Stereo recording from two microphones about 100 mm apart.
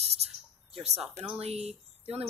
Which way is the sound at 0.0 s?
90° right.